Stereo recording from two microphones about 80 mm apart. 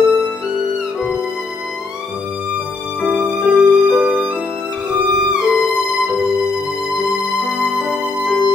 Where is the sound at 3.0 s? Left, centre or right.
Centre.